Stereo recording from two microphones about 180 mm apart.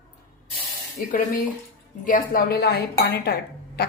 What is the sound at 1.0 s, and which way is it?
Speech, 55° left (ahead or behind).